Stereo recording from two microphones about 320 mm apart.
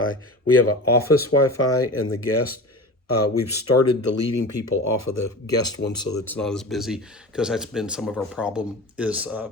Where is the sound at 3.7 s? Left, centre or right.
Left.